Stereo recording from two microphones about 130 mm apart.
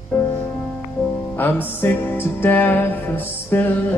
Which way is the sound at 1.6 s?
15° left (ahead or behind).